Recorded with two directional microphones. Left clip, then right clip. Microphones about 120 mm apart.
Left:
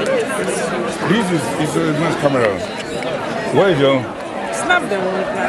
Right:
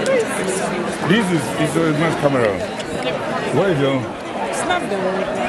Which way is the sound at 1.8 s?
15° left (ahead or behind).